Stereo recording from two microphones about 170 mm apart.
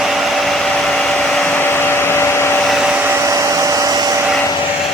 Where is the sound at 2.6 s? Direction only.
Centre (ahead or behind); by 4.2 s 20° right (ahead or behind).